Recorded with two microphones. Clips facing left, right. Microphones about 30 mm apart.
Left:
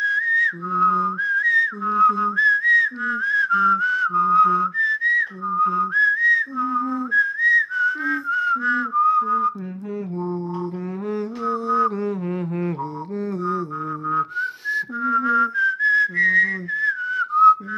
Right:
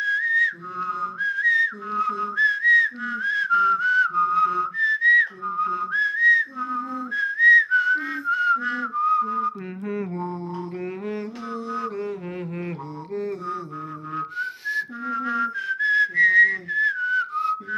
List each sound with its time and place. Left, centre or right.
0.0 s whistling: centre
5.0 s whistling: right
5.7 s whistling: centre
7.2 s whistling: centre
11.1 s music: centre
11.7 s mantra: centre
14.1 s whistling: centre